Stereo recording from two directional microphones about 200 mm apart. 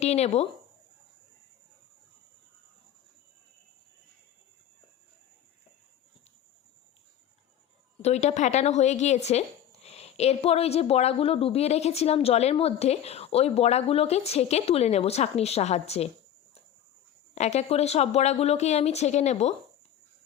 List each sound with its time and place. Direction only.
0.0 s speech: 35° left (ahead or behind)
8.0 s speech: 35° left (ahead or behind)
17.3 s speech: 35° left (ahead or behind)